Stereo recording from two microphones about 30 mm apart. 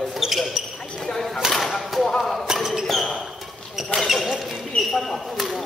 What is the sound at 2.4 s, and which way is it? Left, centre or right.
Basketball bounce, centre.